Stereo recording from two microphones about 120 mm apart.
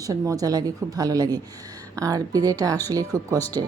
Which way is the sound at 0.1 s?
30° right (ahead or behind).